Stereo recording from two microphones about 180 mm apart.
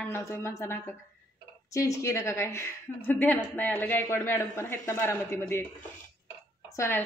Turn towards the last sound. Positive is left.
turn(degrees=15)  # may be behind; listen again after turning